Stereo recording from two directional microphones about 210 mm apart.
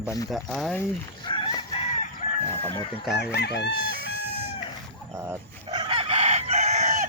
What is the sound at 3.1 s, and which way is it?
Chicken, 50° left (ahead or behind).